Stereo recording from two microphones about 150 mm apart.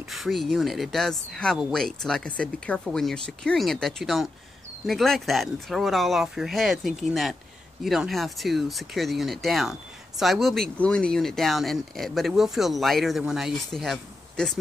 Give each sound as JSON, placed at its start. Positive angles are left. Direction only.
{"t": 0.1, "sound": "speech", "side_deg": 0}